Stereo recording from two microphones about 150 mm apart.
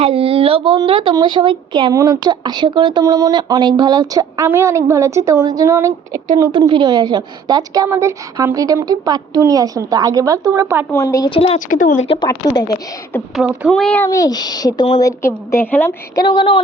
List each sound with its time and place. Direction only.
0.0 s speech: 40° right (ahead or behind); by 6.2 s 15° right (ahead or behind)
6.5 s speech: 35° right (ahead or behind); by 10.8 s 15° right (ahead or behind)
10.9 s speech: 20° left (ahead or behind)
11.3 s a sound: 40° left (ahead or behind)
11.7 s a woman's voice: 60° left (ahead or behind)
12.0 s a sound: 35° left (ahead or behind)
12.3 s speech: 25° left (ahead or behind)
13.3 s speech: 5° right (ahead or behind)
13.7 s speech: 5° left (ahead or behind)
14.1 s a woman's voice: 25° left (ahead or behind)
16.1 s a sound: 35° left (ahead or behind)